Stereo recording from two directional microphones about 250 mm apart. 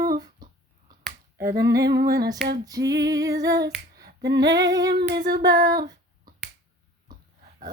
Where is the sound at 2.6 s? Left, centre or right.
Centre.